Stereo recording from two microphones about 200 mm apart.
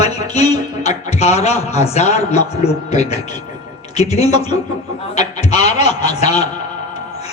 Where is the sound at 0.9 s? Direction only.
35° left (ahead or behind).